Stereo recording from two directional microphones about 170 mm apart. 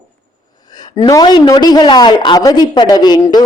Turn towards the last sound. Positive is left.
turn(degrees=25)  # may be behind; listen again after turning